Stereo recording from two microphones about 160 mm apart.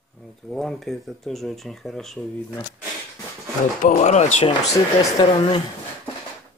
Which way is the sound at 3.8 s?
50° left (ahead or behind).